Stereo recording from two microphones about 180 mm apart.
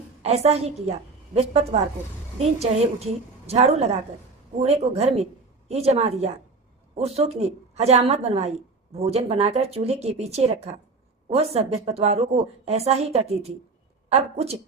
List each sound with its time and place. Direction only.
0.2 s a woman's voice: 35° right (ahead or behind)